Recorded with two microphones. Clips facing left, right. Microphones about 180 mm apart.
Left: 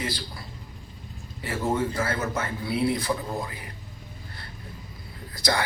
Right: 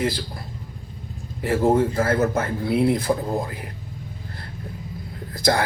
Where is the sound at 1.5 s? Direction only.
55° right (ahead or behind).